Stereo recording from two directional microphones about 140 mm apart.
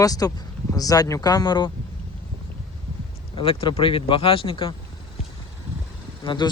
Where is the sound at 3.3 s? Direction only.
40° left (ahead or behind).